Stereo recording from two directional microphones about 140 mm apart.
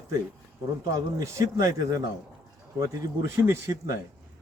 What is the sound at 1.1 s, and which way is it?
A man's voice, 25° right (ahead or behind).